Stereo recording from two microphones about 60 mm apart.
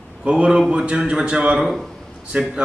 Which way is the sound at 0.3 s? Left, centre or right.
Centre.